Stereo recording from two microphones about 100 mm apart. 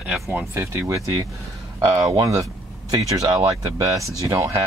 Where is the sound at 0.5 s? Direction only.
30° right (ahead or behind).